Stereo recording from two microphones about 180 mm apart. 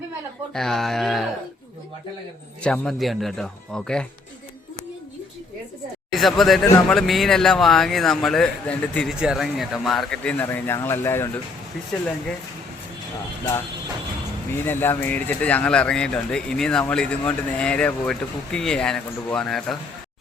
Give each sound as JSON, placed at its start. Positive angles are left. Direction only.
{"t": 0.5, "sound": "speech", "side_deg": 0}
{"t": 2.6, "sound": "speech", "side_deg": 5}
{"t": 6.1, "sound": "speech", "side_deg": 0}
{"t": 14.6, "sound": "speech", "side_deg": 10}